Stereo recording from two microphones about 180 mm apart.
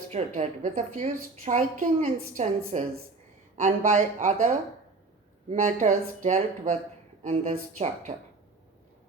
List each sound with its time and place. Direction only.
0.1 s a woman's voice: 40° right (ahead or behind)